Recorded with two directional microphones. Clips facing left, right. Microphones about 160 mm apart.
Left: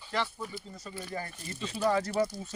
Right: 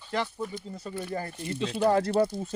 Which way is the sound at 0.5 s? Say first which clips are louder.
Right 5 dB; 30° right (ahead or behind).